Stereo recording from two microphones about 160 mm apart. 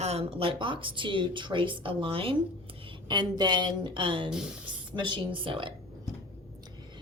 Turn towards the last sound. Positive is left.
turn(degrees=-30)  # may be behind; listen again after turning